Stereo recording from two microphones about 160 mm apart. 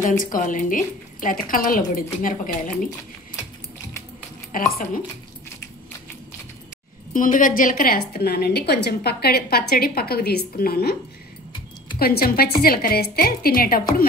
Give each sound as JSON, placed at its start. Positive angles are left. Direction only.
{"t": 0.2, "sound": "a woman's voice", "side_deg": 55}
{"t": 4.5, "sound": "a woman's voice", "side_deg": 60}
{"t": 7.2, "sound": "a woman's voice", "side_deg": 55}
{"t": 12.0, "sound": "a woman's voice", "side_deg": 70}